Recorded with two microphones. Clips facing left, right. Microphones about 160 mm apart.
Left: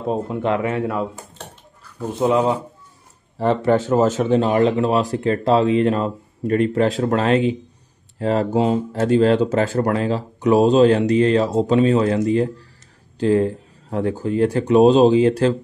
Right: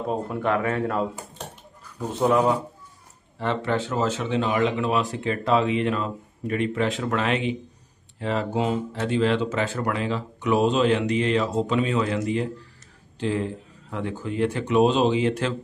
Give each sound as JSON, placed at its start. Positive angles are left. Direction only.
{"t": 0.1, "sound": "speech", "side_deg": 25}
{"t": 2.0, "sound": "speech", "side_deg": 15}
{"t": 3.3, "sound": "speech", "side_deg": 40}
{"t": 13.2, "sound": "speech", "side_deg": 40}